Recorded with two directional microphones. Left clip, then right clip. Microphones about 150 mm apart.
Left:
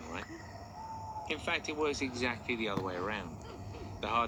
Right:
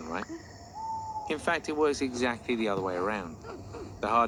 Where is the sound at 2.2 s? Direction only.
50° right (ahead or behind).